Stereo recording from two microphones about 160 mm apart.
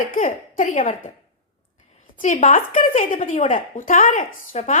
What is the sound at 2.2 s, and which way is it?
A woman's voice, 55° left (ahead or behind).